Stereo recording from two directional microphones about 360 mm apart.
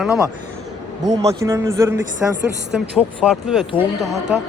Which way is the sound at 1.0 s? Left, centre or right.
Centre.